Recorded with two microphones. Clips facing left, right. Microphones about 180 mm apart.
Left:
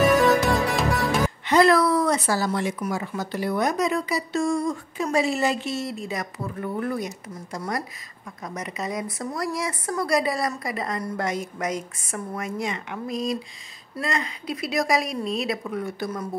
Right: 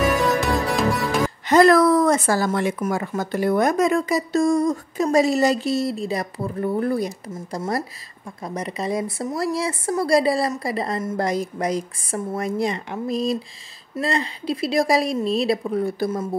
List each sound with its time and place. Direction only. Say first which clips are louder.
0.0 s music: left 2 dB; centre (ahead or behind)
1.5 s a woman's voice: right 4 dB; 45° right (ahead or behind); by 16.3 s 30° right (ahead or behind)